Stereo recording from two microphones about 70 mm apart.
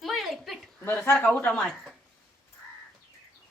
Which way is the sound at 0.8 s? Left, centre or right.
Left.